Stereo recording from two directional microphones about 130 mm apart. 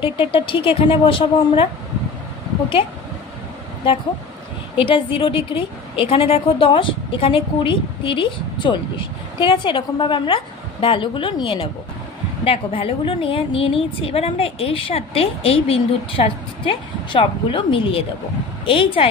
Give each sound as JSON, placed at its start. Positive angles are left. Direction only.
{"t": 0.0, "sound": "a woman's voice", "side_deg": 40}
{"t": 4.7, "sound": "a woman's voice", "side_deg": 45}